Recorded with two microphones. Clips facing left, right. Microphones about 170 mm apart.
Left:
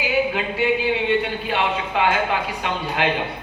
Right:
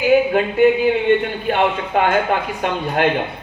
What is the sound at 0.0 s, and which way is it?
Speech, 50° right (ahead or behind).